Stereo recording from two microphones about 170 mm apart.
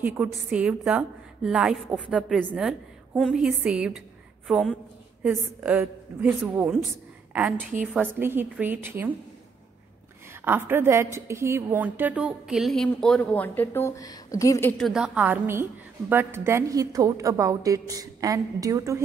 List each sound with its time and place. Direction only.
0.0 s a woman's voice: 10° right (ahead or behind)
10.4 s a woman's voice: 15° right (ahead or behind); by 14.9 s 10° left (ahead or behind)
14.9 s a woman's voice: 5° right (ahead or behind)